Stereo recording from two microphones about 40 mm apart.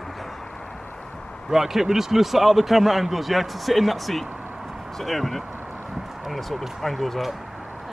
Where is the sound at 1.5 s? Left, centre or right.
Centre.